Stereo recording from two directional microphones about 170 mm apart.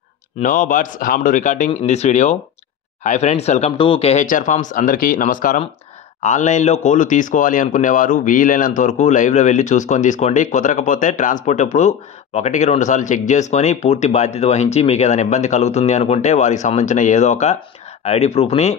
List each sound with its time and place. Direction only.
0.4 s a man's voice: 55° left (ahead or behind)